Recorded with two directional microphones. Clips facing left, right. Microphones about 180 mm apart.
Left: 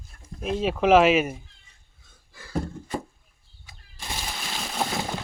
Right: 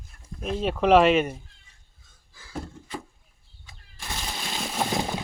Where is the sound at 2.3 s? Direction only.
65° left (ahead or behind).